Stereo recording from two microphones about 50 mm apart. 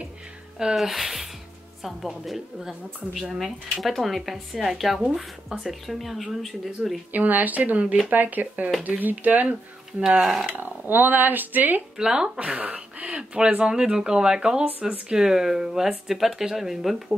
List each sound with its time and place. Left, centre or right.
0.7 s speech: centre
7.1 s speech: right
9.9 s speech: centre
10.5 s speech: right
12.0 s speech: centre
12.4 s speech: right; by 17.0 s centre